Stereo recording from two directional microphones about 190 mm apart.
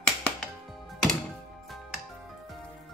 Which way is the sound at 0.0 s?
5° left (ahead or behind).